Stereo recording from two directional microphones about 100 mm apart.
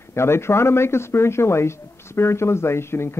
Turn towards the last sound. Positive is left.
turn(degrees=25)  # may be behind; listen again after turning